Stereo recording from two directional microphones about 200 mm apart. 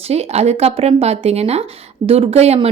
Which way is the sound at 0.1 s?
30° right (ahead or behind).